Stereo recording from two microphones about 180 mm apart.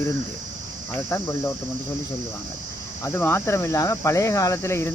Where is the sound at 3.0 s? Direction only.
15° left (ahead or behind).